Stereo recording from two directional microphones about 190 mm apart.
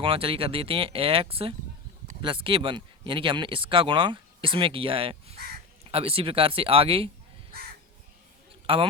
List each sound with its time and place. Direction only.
0.0 s speech: 30° right (ahead or behind)
8.6 s speech: 30° right (ahead or behind)